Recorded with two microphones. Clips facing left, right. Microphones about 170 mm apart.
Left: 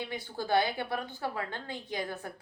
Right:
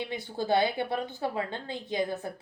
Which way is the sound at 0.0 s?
25° right (ahead or behind).